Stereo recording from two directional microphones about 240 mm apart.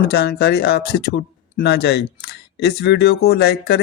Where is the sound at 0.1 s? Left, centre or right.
Left.